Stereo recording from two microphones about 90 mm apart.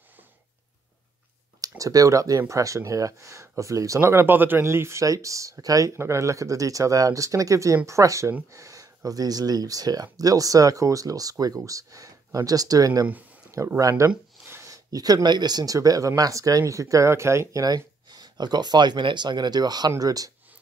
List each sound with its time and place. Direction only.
1.6 s speech: 40° right (ahead or behind)
14.4 s a sound: 25° right (ahead or behind)
14.7 s speech: 45° right (ahead or behind)